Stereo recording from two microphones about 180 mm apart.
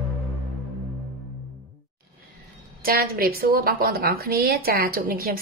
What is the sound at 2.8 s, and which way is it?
A woman's voice, 55° right (ahead or behind).